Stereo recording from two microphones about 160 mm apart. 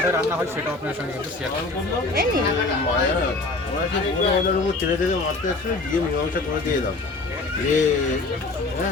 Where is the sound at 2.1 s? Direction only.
65° right (ahead or behind).